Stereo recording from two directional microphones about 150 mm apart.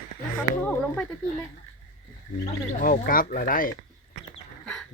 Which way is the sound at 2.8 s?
70° left (ahead or behind).